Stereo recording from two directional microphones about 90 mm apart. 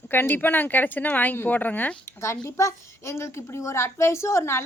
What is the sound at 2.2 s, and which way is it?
A woman's voice, 30° left (ahead or behind).